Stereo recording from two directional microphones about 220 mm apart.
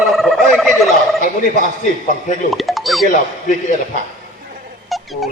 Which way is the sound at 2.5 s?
Centre (ahead or behind).